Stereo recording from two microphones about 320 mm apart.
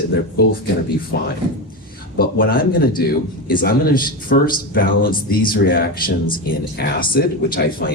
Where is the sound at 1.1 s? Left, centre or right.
Left.